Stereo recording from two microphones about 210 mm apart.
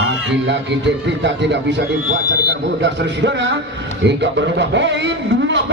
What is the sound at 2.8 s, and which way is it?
A man's voice, 55° right (ahead or behind).